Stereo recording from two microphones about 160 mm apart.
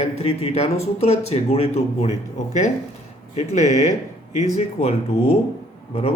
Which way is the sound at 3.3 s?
45° left (ahead or behind).